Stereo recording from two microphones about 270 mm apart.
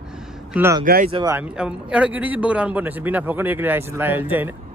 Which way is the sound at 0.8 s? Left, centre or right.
Right.